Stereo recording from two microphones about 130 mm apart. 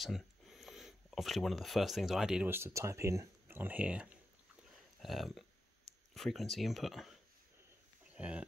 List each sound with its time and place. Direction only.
0.0 s speech: centre (ahead or behind)
2.4 s speech: 20° right (ahead or behind)